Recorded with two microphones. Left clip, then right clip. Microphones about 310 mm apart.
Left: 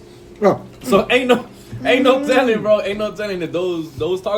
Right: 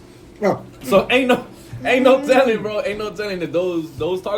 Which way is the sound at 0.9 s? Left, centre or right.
Centre.